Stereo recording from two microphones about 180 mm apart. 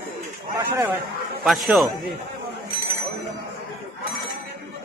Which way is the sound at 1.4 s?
Centre (ahead or behind).